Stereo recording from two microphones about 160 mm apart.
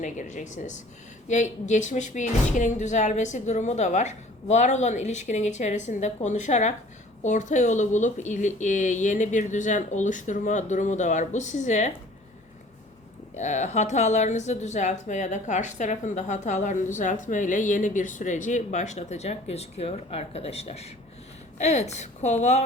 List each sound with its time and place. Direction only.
0.0 s a woman's voice: 50° left (ahead or behind)
13.3 s a woman's voice: 45° left (ahead or behind)